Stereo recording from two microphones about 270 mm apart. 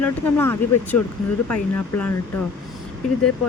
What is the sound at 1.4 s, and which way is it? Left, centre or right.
Speech, left.